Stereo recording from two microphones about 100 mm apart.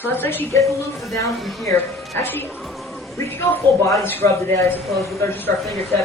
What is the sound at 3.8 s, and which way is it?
A woman's voice, 30° left (ahead or behind).